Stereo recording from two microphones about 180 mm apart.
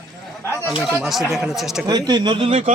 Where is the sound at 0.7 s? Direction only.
5° right (ahead or behind).